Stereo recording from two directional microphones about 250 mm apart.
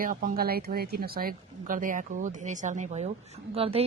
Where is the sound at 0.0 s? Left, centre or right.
Right.